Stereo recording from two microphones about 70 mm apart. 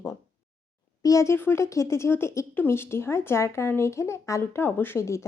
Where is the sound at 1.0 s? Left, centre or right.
Left.